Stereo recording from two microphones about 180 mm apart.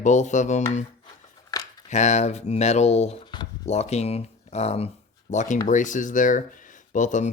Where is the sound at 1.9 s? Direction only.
40° left (ahead or behind).